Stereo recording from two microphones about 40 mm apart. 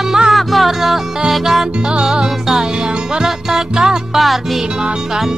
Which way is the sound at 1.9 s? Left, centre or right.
Centre.